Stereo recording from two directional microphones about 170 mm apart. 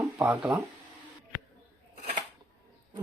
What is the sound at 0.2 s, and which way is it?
Speech, 10° right (ahead or behind).